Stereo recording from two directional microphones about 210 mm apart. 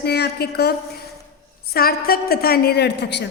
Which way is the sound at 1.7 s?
45° left (ahead or behind).